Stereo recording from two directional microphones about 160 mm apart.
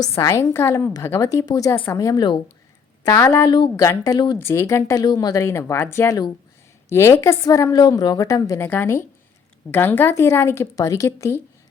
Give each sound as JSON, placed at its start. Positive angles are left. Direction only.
{"t": 0.2, "sound": "a woman's voice", "side_deg": 20}
{"t": 3.1, "sound": "a woman's voice", "side_deg": 15}